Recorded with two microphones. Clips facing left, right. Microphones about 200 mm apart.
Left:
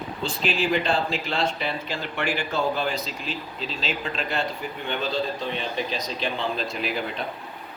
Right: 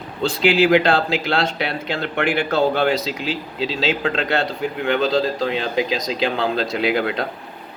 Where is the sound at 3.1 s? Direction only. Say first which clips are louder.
Right 8 dB; 90° right.